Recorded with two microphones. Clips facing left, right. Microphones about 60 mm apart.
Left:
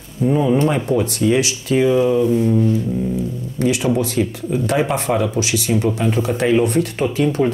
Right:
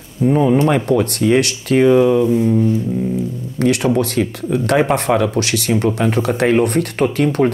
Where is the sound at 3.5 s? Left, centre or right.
Right.